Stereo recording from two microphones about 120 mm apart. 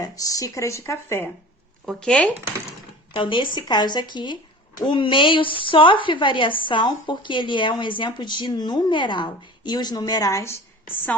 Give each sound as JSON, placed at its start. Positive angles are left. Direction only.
{"t": 0.0, "sound": "speech", "side_deg": 30}
{"t": 1.9, "sound": "speech", "side_deg": 5}
{"t": 3.1, "sound": "speech", "side_deg": 45}